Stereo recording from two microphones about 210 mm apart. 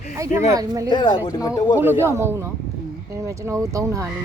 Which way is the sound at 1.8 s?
10° right (ahead or behind).